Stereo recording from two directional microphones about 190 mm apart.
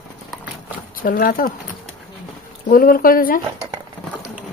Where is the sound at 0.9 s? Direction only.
45° left (ahead or behind).